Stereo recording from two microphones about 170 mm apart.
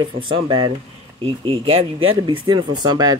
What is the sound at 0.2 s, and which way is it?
Speech, 30° right (ahead or behind).